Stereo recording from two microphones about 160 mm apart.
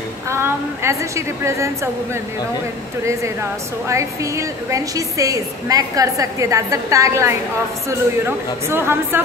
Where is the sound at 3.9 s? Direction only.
20° right (ahead or behind).